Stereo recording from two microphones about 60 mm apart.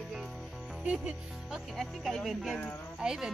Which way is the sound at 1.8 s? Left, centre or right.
Centre.